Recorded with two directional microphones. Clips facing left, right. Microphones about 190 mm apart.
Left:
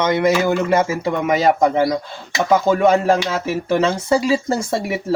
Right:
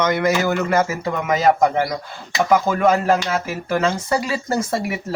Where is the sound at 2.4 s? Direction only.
25° left (ahead or behind).